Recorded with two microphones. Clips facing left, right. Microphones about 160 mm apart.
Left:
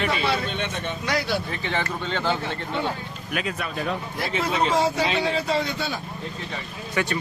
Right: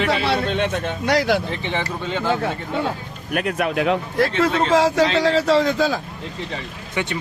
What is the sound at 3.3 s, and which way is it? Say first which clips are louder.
Speech: right 8 dB; 60° right (ahead or behind).